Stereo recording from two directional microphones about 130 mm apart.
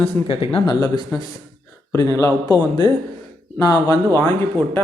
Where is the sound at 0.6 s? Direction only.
30° left (ahead or behind).